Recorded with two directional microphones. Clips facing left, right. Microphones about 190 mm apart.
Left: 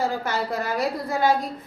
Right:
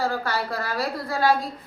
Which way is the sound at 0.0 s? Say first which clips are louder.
Left 1 dB; 20° left (ahead or behind).